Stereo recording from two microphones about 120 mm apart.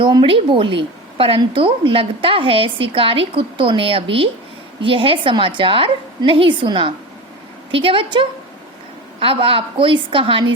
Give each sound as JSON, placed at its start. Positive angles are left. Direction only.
{"t": 0.0, "sound": "a woman's voice", "side_deg": -40}